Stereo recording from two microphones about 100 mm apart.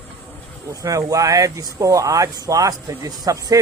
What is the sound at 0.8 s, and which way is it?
Speech, 35° right (ahead or behind).